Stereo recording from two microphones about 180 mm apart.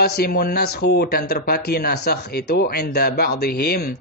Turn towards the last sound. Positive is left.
turn(degrees=60)  # may be behind; listen again after turning